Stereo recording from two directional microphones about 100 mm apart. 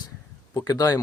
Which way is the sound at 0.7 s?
40° left (ahead or behind).